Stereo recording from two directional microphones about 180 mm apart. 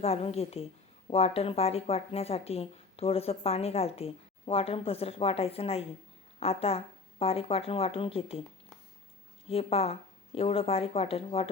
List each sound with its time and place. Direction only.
0.0 s speech: 35° left (ahead or behind)
9.5 s speech: 35° left (ahead or behind)